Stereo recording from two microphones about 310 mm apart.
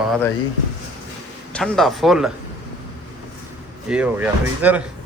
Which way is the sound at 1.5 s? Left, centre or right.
Centre.